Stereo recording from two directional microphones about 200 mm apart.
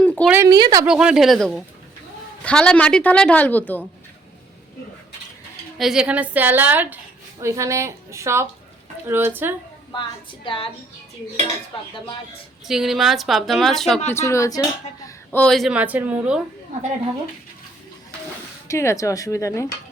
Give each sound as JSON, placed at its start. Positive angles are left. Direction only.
{"t": 0.0, "sound": "a sound", "side_deg": 5}
{"t": 0.3, "sound": "a woman's voice", "side_deg": -15}
{"t": 0.9, "sound": "a woman's voice", "side_deg": -5}
{"t": 5.7, "sound": "a woman's voice", "side_deg": 0}
{"t": 10.4, "sound": "a woman's voice", "side_deg": 25}
{"t": 12.6, "sound": "speech", "side_deg": 0}
{"t": 14.1, "sound": "speech", "side_deg": 15}
{"t": 18.7, "sound": "a woman's voice", "side_deg": 15}